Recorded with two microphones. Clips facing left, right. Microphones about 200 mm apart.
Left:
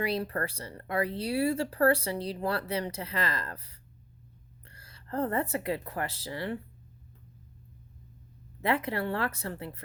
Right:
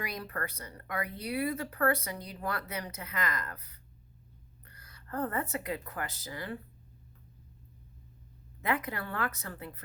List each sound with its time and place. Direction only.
0.0 s speech: 30° left (ahead or behind)
8.6 s speech: 30° left (ahead or behind)